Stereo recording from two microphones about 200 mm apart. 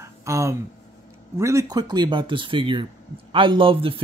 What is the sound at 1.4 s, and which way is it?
Speech, 15° right (ahead or behind).